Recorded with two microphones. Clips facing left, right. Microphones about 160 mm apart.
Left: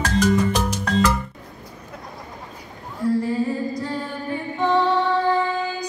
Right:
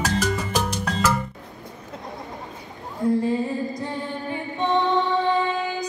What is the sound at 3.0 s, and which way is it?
Music, 20° right (ahead or behind).